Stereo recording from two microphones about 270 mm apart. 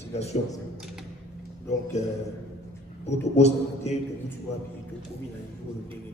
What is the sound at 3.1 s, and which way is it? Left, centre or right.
Speech, left.